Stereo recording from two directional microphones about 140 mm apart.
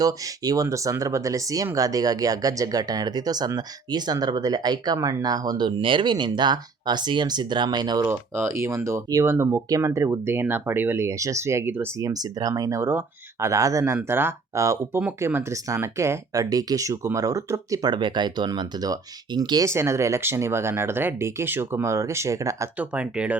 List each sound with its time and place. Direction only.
0.0 s speech: 25° right (ahead or behind)
8.0 s speech: 15° right (ahead or behind)
22.8 s speech: 10° right (ahead or behind)